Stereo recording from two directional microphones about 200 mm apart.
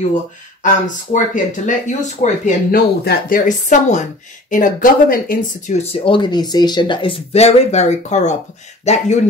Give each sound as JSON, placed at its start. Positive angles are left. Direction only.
{"t": 0.6, "sound": "speech", "side_deg": 40}
{"t": 3.0, "sound": "speech", "side_deg": 50}